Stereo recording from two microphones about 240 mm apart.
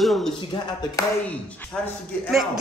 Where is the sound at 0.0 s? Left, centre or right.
Centre.